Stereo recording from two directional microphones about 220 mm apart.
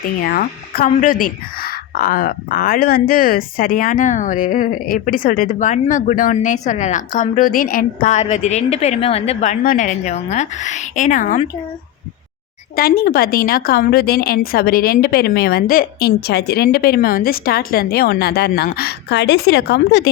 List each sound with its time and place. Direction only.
0.2 s speech: 40° left (ahead or behind)
12.7 s a woman's voice: 45° left (ahead or behind)